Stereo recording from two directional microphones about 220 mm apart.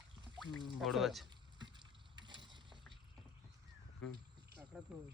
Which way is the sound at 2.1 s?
20° right (ahead or behind).